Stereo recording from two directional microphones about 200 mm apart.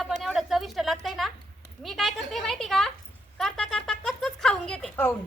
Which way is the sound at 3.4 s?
Centre (ahead or behind).